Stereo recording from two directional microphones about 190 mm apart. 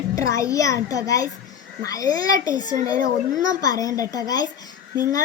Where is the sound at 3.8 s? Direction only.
20° left (ahead or behind).